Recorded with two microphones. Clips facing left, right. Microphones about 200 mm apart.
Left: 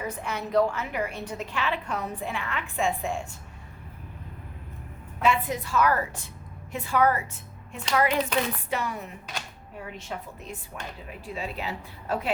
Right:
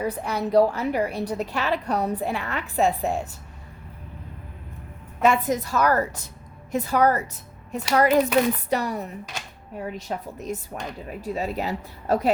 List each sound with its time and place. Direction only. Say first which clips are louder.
0.0 s a woman's voice: right 6 dB; 35° right (ahead or behind)
5.2 s a woman's voice: right 5 dB; 45° right (ahead or behind)